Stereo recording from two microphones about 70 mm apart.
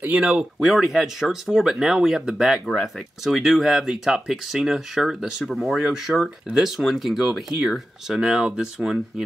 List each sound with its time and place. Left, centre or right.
0.0 s speech: right
0.3 s speech: centre